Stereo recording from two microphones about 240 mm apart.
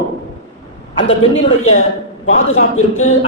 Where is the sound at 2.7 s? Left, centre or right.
Left.